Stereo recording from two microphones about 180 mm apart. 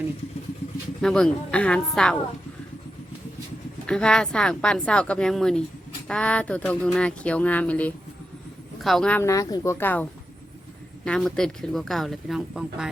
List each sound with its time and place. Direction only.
1.0 s speech: 5° left (ahead or behind)
3.8 s speech: 5° left (ahead or behind)